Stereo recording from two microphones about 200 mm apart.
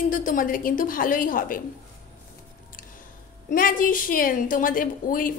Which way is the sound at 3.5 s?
45° left (ahead or behind).